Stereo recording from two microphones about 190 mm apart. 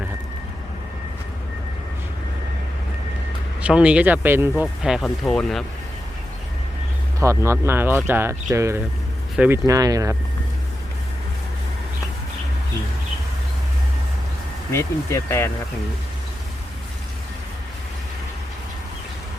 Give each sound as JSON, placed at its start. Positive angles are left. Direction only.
{"t": 3.6, "sound": "speech", "side_deg": -5}
{"t": 7.2, "sound": "speech", "side_deg": -15}
{"t": 14.7, "sound": "speech", "side_deg": 15}